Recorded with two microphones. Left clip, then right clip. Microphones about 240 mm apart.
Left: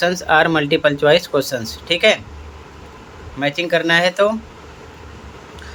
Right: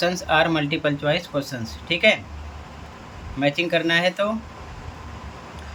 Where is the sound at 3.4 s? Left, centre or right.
Centre.